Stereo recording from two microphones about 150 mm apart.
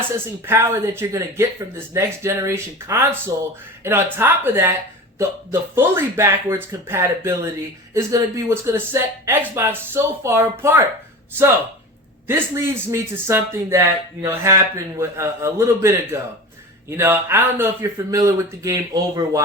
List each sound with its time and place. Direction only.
0.4 s speech: 15° right (ahead or behind)
12.3 s speech: 15° right (ahead or behind)